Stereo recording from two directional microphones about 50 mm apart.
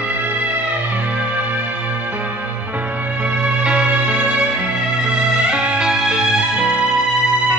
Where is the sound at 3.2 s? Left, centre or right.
Right.